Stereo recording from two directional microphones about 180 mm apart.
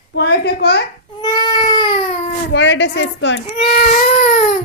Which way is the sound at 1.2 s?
20° left (ahead or behind).